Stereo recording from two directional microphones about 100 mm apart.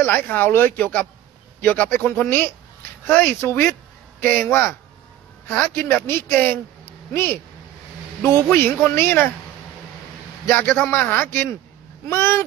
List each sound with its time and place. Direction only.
0.0 s speech: 20° left (ahead or behind)
8.6 s speech: 20° left (ahead or behind)
10.4 s speech: 20° left (ahead or behind)